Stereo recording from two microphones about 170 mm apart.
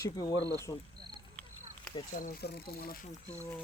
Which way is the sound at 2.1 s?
55° left (ahead or behind).